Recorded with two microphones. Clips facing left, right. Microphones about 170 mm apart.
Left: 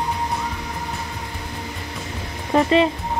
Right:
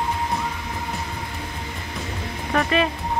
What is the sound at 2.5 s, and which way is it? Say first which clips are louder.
Speech: left 5 dB; 25° left (ahead or behind).